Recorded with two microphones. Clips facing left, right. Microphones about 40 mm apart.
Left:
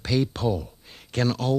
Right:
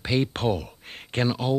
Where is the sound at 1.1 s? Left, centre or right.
Right.